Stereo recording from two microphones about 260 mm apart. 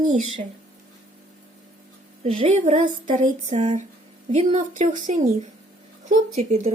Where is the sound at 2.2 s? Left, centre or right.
Right.